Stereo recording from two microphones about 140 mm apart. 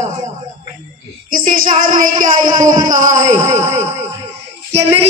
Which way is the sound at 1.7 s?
80° right.